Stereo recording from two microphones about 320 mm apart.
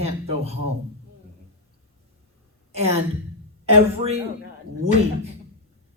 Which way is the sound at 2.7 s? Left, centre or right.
Centre.